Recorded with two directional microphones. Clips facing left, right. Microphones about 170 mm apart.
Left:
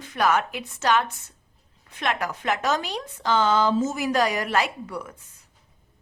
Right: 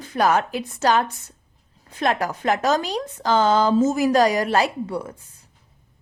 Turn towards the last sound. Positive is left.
turn(degrees=-30)  # may be behind; listen again after turning